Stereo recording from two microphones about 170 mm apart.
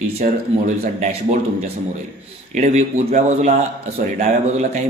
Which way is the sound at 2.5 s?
45° right (ahead or behind).